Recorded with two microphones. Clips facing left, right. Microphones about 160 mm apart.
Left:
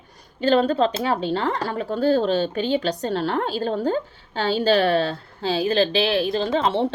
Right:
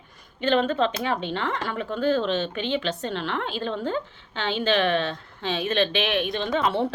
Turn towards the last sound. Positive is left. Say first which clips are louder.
# left 3 dB
turn(degrees=30)  # may be behind; listen again after turning